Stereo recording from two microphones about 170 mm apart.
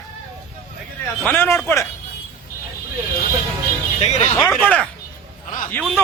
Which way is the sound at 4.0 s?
40° left (ahead or behind).